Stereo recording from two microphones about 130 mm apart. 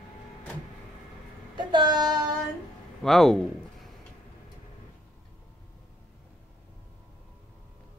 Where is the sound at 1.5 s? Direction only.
35° right (ahead or behind).